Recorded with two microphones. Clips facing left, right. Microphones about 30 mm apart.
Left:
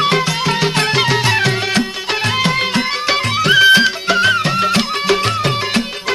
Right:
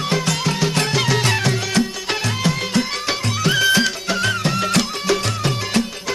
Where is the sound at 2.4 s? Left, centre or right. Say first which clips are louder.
Left 4 dB; left.